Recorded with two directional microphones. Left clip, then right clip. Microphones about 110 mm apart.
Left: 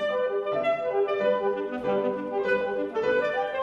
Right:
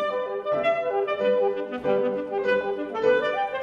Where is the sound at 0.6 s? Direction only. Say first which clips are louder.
Right 2 dB; 30° right (ahead or behind).